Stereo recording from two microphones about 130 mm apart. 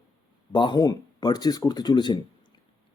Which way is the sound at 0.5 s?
35° left (ahead or behind).